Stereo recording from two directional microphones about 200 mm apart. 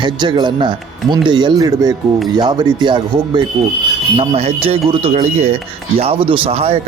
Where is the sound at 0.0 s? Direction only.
25° right (ahead or behind).